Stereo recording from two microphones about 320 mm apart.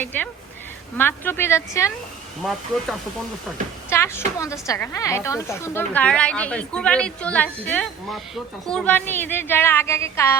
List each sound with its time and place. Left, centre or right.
0.0 s a woman's voice: centre
3.8 s a sound: centre
4.4 s a woman's voice: centre